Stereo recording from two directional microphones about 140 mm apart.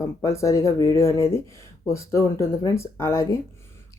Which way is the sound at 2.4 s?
20° left (ahead or behind).